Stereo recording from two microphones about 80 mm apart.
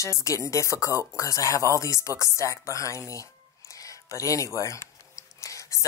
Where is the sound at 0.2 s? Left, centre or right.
Left.